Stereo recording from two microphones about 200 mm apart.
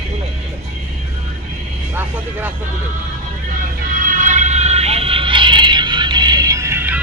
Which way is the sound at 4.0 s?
40° right (ahead or behind).